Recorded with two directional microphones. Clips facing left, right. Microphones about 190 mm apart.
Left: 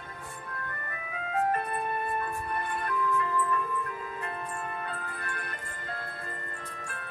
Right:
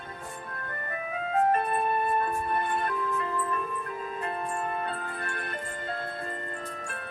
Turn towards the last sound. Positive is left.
turn(degrees=-25)  # may be behind; listen again after turning